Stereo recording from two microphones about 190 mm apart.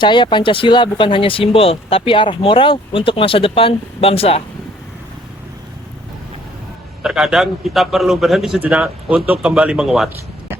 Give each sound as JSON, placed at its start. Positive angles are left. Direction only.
{"t": 0.0, "sound": "speech", "side_deg": 25}
{"t": 7.0, "sound": "a man's voice", "side_deg": -5}